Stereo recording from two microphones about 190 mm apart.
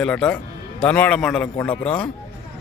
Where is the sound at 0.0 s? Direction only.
5° left (ahead or behind).